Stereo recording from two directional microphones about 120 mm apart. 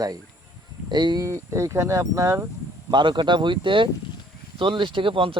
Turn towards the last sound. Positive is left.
turn(degrees=-45)  # may be behind; listen again after turning